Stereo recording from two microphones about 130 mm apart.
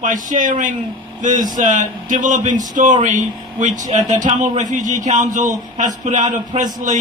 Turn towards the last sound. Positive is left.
turn(degrees=-75)  # may be behind; listen again after turning